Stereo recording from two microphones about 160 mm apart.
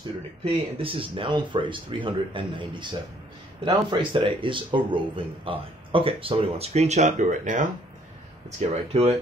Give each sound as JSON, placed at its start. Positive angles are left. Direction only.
{"t": 0.4, "sound": "speech", "side_deg": -35}